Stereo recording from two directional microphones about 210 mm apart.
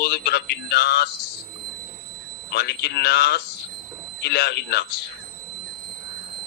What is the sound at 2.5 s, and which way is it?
A man's voice, 50° left (ahead or behind).